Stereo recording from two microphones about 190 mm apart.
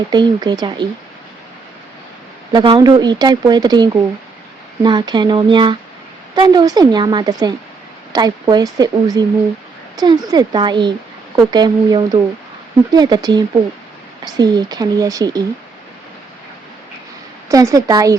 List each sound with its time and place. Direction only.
0.1 s speech: 20° right (ahead or behind)
2.5 s speech: 25° right (ahead or behind)
17.5 s a woman's voice: 15° right (ahead or behind)